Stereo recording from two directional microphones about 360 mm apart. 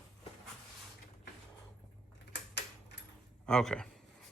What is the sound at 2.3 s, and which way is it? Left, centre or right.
Typewriter, left.